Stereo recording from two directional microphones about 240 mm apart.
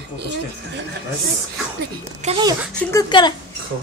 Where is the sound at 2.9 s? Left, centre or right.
Centre.